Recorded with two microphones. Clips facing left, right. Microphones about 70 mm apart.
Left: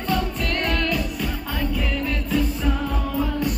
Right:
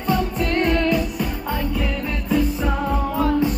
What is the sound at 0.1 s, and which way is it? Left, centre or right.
Music, right.